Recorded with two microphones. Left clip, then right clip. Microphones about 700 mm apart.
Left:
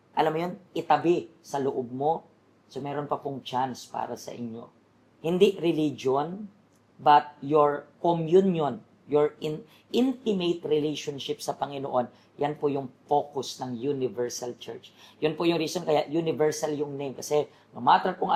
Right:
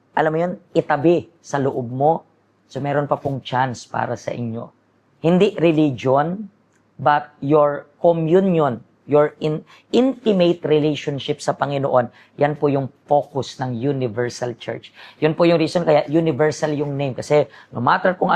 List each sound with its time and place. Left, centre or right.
0.1 s speech: right
5.2 s speech: right